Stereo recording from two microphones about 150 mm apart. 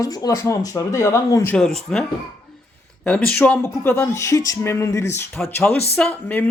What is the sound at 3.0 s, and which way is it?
Speech, 5° left (ahead or behind).